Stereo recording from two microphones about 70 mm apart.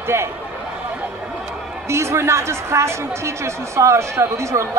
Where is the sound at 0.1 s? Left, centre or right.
Right.